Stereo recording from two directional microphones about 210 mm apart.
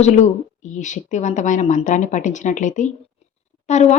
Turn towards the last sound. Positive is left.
turn(degrees=35)  # may be behind; listen again after turning